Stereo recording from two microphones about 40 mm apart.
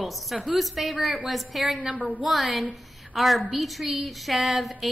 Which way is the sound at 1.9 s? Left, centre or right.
Left.